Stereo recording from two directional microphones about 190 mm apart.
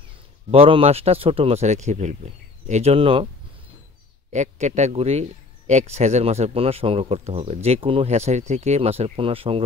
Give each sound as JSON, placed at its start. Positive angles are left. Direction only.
{"t": 0.5, "sound": "speech", "side_deg": -30}
{"t": 4.3, "sound": "speech", "side_deg": -40}